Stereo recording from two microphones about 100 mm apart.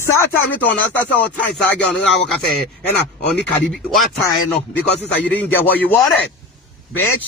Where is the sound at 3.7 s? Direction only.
5° left (ahead or behind).